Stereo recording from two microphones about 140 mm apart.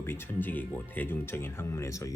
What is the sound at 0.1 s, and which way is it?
Speech, 15° left (ahead or behind).